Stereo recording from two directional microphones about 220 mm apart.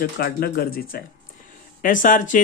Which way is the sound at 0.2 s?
45° left (ahead or behind).